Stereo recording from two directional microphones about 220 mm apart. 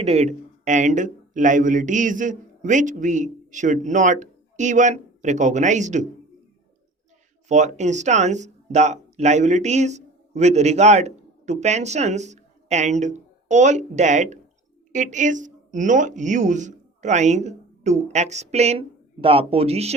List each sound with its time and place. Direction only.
0.0 s speech: 30° right (ahead or behind)
7.4 s speech: 30° right (ahead or behind)